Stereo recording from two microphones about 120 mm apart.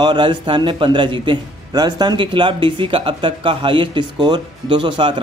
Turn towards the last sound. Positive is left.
turn(degrees=-45)  # may be behind; listen again after turning